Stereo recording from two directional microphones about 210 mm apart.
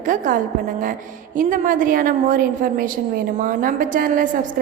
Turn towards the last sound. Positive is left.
turn(degrees=-40)  # may be behind; listen again after turning